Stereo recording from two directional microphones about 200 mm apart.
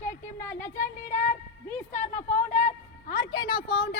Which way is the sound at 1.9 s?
35° left (ahead or behind).